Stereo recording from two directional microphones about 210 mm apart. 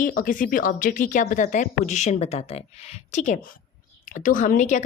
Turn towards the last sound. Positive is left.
turn(degrees=35)  # may be behind; listen again after turning